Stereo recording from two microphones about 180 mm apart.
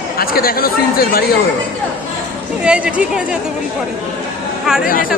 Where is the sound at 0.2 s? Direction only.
55° left (ahead or behind).